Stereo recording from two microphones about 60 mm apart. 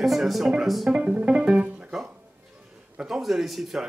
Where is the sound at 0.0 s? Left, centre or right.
Centre.